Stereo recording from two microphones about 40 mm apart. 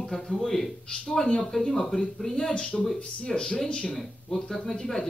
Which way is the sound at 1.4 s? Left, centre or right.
Centre.